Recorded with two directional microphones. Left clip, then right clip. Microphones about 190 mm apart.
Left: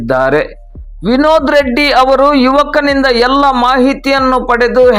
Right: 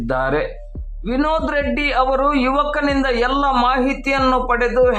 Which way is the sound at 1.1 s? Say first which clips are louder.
Left 10 dB; 40° left (ahead or behind).